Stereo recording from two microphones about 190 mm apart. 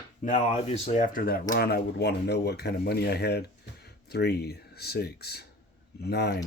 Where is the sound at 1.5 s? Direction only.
60° left (ahead or behind).